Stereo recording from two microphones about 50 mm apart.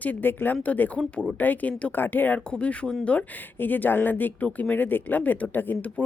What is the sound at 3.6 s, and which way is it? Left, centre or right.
Speech, left.